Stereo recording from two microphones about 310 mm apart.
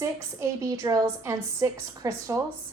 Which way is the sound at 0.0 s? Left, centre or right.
Centre.